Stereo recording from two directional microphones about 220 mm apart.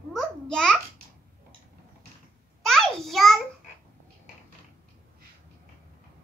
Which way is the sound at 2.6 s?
Centre (ahead or behind).